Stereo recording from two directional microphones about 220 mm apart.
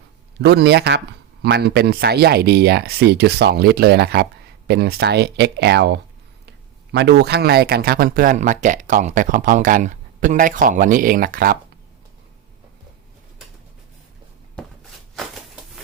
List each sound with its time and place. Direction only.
0.4 s speech: 50° right (ahead or behind)
14.6 s walk: 5° left (ahead or behind)
15.1 s a sound: centre (ahead or behind)